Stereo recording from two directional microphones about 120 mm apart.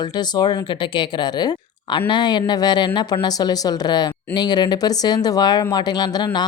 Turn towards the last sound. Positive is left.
turn(degrees=35)  # may be behind; listen again after turning